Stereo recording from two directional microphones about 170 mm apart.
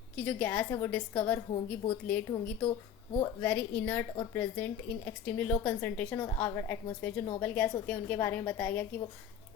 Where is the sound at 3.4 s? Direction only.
10° left (ahead or behind).